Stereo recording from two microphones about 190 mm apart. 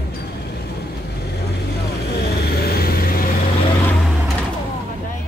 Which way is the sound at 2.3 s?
55° left (ahead or behind).